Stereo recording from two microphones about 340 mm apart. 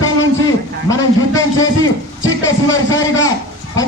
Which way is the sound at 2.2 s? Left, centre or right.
Left.